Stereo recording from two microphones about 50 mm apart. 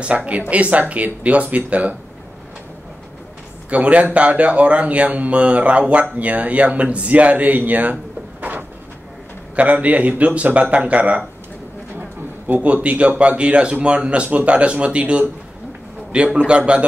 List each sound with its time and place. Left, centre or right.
0.0 s speech: right
3.7 s speech: right
12.4 s speech: right
16.3 s speech: right